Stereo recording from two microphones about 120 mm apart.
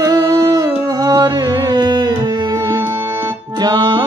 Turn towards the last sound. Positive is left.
turn(degrees=-40)  # may be behind; listen again after turning